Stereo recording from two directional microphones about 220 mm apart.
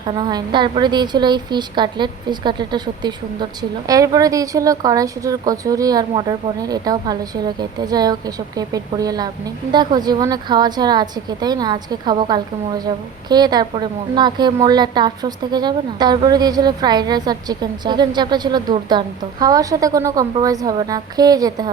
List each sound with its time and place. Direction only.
0.2 s a woman's voice: 20° right (ahead or behind)